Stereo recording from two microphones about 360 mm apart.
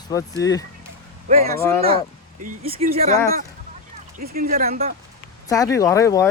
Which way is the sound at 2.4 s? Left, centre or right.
Centre.